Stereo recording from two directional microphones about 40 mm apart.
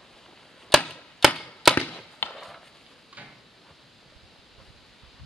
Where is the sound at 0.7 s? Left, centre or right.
Centre.